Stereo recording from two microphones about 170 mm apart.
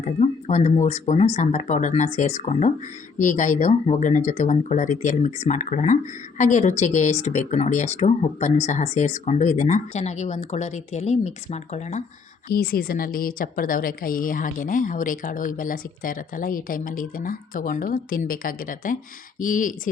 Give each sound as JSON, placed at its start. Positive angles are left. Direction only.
{"t": 0.0, "sound": "speech", "side_deg": 40}
{"t": 12.5, "sound": "a woman's voice", "side_deg": 60}